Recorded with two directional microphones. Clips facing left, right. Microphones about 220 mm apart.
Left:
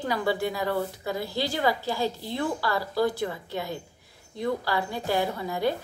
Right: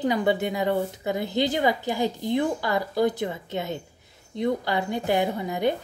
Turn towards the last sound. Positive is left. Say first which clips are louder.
# right 2 dB
turn(degrees=-20)  # may be behind; listen again after turning